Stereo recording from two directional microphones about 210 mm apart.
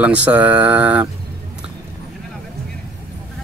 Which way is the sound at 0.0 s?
5° right (ahead or behind).